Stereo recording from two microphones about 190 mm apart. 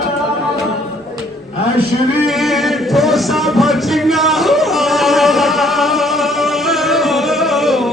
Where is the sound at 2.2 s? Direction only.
Centre (ahead or behind).